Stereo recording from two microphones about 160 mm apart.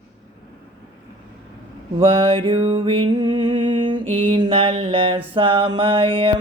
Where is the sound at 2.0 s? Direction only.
35° right (ahead or behind).